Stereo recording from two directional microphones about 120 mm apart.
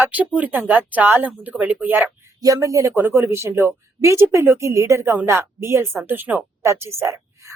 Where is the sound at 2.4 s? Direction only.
30° right (ahead or behind).